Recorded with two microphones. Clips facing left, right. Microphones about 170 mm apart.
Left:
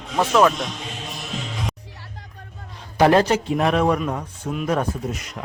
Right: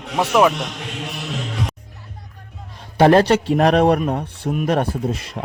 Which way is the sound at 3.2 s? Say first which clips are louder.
Right 4 dB; 65° right (ahead or behind).